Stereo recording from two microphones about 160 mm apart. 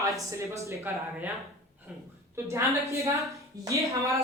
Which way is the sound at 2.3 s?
15° right (ahead or behind).